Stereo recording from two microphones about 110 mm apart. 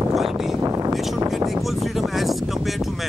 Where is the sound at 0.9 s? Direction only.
Centre (ahead or behind).